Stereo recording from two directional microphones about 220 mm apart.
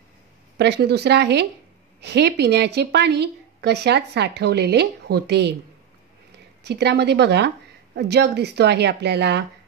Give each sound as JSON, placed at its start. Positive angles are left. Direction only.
{"t": 0.6, "sound": "a woman's voice", "side_deg": -50}
{"t": 6.6, "sound": "a woman's voice", "side_deg": -50}